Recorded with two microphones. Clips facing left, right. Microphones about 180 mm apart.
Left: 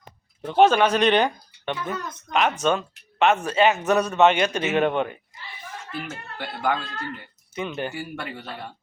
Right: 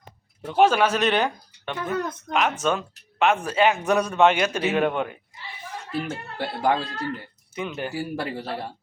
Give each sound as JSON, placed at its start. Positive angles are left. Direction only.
{"t": 0.4, "sound": "speech", "side_deg": -5}
{"t": 2.0, "sound": "speech", "side_deg": -60}
{"t": 2.3, "sound": "a man's voice", "side_deg": -5}
{"t": 5.9, "sound": "speech", "side_deg": -35}
{"t": 7.5, "sound": "a man's voice", "side_deg": -10}
{"t": 7.9, "sound": "speech", "side_deg": -35}